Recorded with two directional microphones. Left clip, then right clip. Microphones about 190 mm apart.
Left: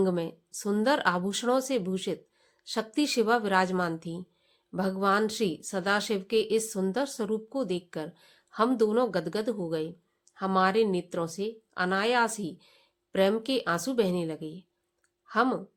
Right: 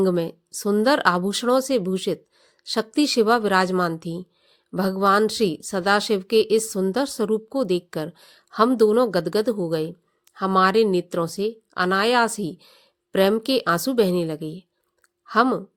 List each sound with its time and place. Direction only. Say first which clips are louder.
0.0 s speech: right 7 dB; 35° right (ahead or behind)